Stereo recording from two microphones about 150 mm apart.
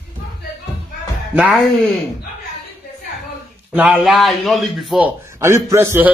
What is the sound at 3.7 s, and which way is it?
Speech, 10° right (ahead or behind).